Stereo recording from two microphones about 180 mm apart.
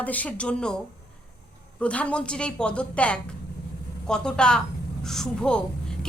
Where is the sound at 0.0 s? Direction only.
10° left (ahead or behind).